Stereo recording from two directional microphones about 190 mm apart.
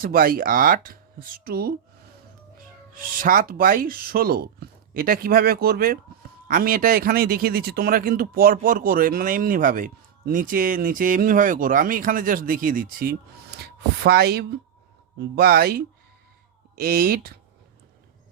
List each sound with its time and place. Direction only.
0.0 s speech: 50° right (ahead or behind)